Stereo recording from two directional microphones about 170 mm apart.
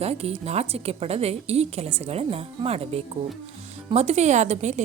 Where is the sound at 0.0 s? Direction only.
40° right (ahead or behind).